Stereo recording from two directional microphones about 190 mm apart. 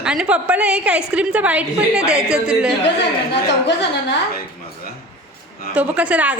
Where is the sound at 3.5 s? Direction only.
65° left (ahead or behind).